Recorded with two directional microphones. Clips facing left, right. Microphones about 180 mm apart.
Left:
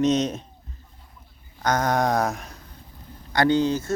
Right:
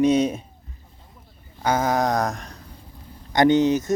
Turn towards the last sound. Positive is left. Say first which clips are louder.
# right 4 dB
turn(degrees=-20)  # may be behind; listen again after turning